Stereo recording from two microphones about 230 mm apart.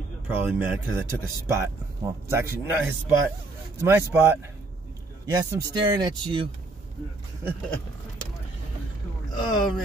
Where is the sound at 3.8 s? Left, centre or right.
Centre.